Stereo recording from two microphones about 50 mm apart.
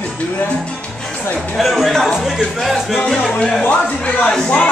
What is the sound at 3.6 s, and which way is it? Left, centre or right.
Speech, left.